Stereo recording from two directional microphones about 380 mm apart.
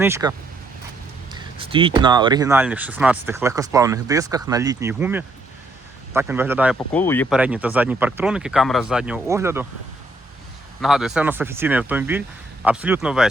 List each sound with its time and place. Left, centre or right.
0.0 s speech: centre
10.8 s speech: centre